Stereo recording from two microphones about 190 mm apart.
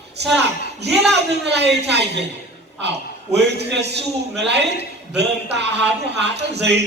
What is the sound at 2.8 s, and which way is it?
A woman's voice, 65° right (ahead or behind).